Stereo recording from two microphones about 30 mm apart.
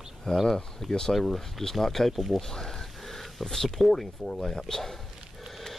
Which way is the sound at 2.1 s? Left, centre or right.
Centre.